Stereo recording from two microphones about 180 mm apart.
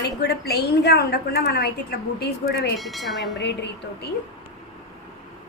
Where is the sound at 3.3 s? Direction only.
70° left (ahead or behind).